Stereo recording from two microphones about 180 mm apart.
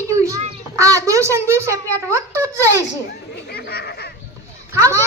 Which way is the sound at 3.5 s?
60° left (ahead or behind).